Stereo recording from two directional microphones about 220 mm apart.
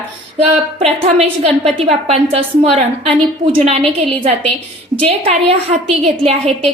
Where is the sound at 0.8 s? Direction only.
30° right (ahead or behind).